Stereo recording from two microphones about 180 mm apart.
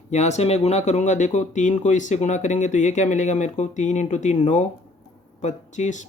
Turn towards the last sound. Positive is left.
turn(degrees=40)  # may be behind; listen again after turning